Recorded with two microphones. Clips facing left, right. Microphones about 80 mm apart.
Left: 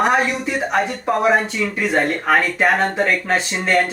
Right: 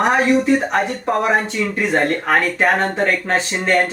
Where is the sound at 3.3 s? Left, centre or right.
Right.